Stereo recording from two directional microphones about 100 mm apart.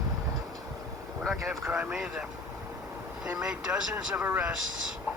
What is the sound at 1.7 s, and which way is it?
Speech, 10° right (ahead or behind).